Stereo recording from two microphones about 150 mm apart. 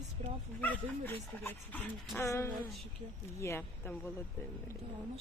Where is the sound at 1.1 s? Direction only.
10° left (ahead or behind).